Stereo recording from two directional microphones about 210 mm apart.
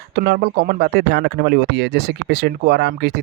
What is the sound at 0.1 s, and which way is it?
Speech, 55° right (ahead or behind).